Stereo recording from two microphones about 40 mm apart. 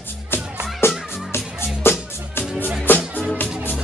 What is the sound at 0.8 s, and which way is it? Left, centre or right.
Music, left.